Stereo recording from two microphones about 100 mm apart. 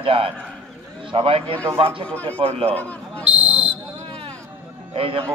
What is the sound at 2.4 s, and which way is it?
Speech, 70° right (ahead or behind).